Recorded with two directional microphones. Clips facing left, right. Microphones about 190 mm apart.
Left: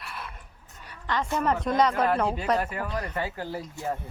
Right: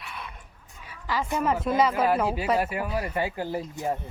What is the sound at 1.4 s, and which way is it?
Speech, 5° right (ahead or behind).